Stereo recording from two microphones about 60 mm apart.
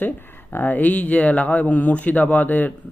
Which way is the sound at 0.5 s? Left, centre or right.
Left.